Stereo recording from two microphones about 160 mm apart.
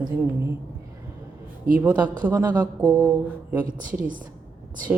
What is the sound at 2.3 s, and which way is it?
Speech, 25° right (ahead or behind).